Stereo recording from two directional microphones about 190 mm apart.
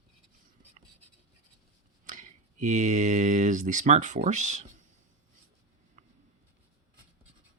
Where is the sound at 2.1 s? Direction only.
40° right (ahead or behind).